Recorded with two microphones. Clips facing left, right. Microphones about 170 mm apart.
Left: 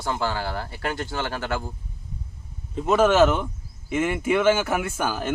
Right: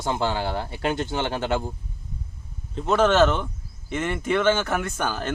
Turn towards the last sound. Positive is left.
turn(degrees=5)  # may be behind; listen again after turning